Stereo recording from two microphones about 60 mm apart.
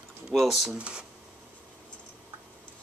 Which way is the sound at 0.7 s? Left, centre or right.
Centre.